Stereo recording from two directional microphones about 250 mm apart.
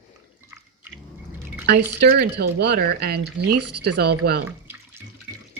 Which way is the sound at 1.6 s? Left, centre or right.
Right.